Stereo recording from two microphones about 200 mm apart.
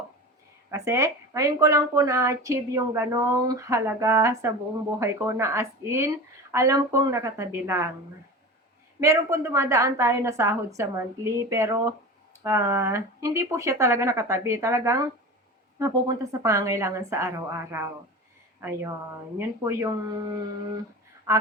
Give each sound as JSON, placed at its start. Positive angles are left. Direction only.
{"t": 0.7, "sound": "a woman's voice", "side_deg": -15}
{"t": 9.0, "sound": "a woman's voice", "side_deg": -15}
{"t": 19.4, "sound": "a woman's voice", "side_deg": -15}